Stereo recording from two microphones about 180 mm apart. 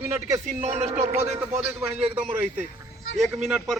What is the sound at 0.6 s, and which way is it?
Speech, 40° right (ahead or behind).